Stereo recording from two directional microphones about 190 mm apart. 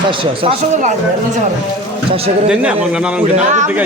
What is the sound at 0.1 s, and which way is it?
Speech, 25° right (ahead or behind).